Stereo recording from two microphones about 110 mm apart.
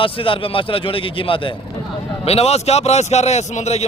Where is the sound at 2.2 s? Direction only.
70° left (ahead or behind); by 3.8 s 85° left.